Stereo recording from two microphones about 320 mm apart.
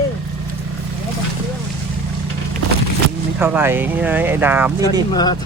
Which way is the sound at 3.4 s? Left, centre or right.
Centre.